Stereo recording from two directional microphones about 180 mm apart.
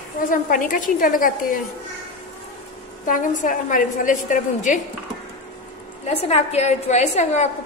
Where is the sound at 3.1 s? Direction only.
45° left (ahead or behind).